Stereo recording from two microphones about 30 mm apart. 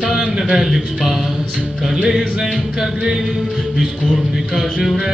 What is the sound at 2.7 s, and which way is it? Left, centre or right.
Music, centre.